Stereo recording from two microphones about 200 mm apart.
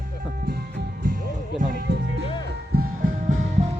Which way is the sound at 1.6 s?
55° right (ahead or behind).